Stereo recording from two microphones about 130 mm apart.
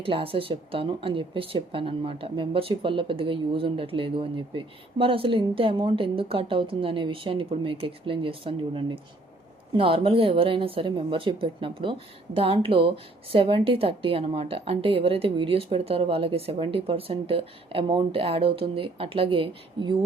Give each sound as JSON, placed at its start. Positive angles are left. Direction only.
{"t": 0.0, "sound": "speech", "side_deg": -45}